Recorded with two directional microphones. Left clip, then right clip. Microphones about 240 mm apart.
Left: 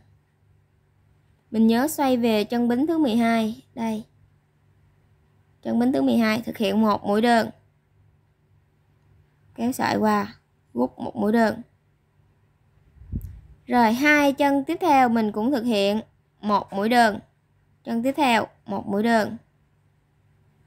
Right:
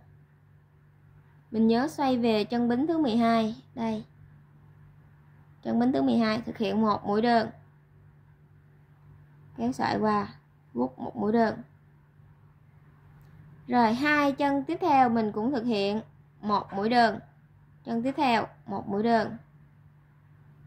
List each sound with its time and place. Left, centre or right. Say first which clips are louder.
1.5 s a woman's voice: left 4 dB; left
5.6 s a woman's voice: left 4 dB; left
9.5 s speech: left 4 dB; left
13.7 s a woman's voice: left 5 dB; left